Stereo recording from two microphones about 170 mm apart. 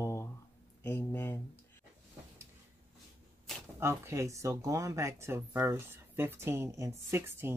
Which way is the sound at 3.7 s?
15° right (ahead or behind).